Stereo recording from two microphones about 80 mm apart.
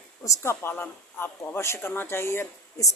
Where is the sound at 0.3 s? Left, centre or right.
Left.